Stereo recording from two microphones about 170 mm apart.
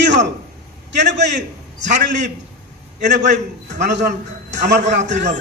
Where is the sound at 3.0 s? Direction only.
90° right.